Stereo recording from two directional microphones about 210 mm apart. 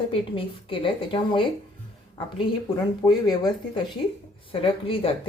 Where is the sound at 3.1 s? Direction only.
20° left (ahead or behind).